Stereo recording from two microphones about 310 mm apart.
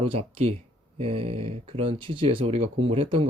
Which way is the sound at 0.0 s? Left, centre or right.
Centre.